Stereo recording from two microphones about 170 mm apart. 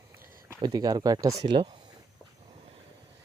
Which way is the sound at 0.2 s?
60° right (ahead or behind).